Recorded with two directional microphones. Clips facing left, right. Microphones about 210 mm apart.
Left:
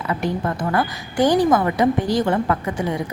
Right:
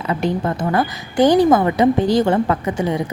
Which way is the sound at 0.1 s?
25° right (ahead or behind).